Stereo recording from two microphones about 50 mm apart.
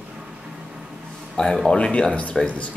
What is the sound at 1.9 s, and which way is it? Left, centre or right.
Speech, left.